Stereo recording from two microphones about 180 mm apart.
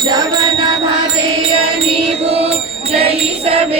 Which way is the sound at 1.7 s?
35° right (ahead or behind).